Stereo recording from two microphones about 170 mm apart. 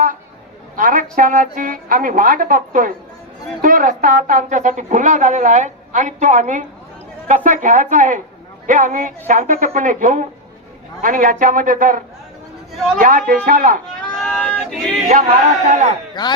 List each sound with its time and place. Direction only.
0.8 s a woman's voice: 50° right (ahead or behind)
13.0 s speech: 50° right (ahead or behind)
14.2 s a sound: 5° left (ahead or behind)
15.6 s speech: 45° right (ahead or behind)
15.9 s a man's voice: 25° left (ahead or behind)